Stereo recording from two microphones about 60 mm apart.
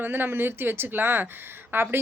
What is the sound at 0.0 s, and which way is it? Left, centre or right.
A woman's voice, right.